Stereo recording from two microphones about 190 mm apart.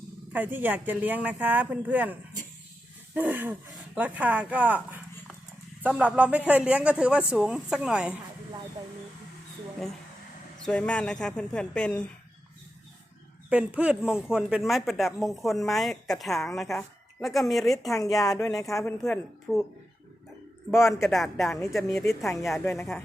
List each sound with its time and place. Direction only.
0.3 s speech: 10° right (ahead or behind)
3.2 s a man's voice: 10° right (ahead or behind)
10.7 s a man's voice: 5° left (ahead or behind)
13.5 s a man's voice: 5° right (ahead or behind)
18.2 s speech: 15° left (ahead or behind)
19.0 s a man's voice: centre (ahead or behind)
20.7 s a man's voice: centre (ahead or behind)
22.6 s speech: 10° left (ahead or behind)